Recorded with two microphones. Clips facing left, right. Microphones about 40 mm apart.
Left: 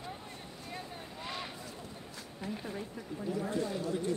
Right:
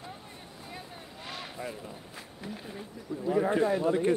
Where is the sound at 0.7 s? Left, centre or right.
Centre.